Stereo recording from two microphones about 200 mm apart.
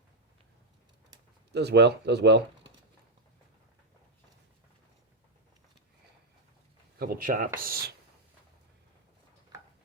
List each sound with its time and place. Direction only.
1.5 s speech: 60° right (ahead or behind)
7.0 s speech: 45° right (ahead or behind)